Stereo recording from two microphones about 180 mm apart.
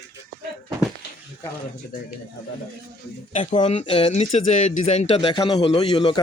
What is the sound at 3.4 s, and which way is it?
Speech, 25° left (ahead or behind).